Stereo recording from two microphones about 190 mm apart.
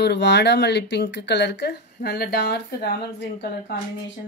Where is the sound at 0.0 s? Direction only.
65° left (ahead or behind).